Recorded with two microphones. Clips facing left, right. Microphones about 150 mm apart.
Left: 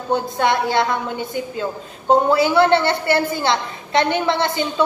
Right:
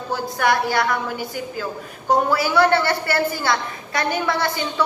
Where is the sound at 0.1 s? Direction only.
25° left (ahead or behind).